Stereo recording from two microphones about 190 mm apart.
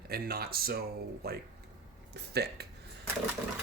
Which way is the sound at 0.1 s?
55° right (ahead or behind).